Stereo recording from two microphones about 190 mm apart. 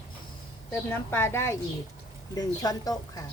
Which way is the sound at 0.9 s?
10° left (ahead or behind).